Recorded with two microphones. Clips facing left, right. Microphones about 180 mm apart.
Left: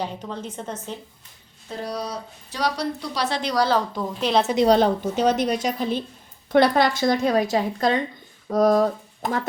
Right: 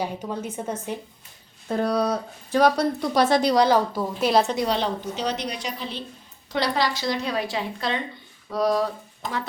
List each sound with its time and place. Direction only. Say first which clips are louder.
0.0 s a woman's voice: right 1 dB; 10° right (ahead or behind)
1.6 s speech: right 7 dB; 55° right (ahead or behind)
3.4 s a woman's voice: right 3 dB; 25° right (ahead or behind)
3.7 s a woman's voice: right 2 dB; 10° right (ahead or behind)
4.6 s a woman's voice: left 7 dB; 45° left (ahead or behind)